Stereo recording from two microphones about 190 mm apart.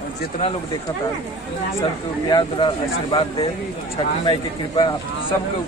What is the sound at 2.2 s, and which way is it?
Speech, 25° left (ahead or behind).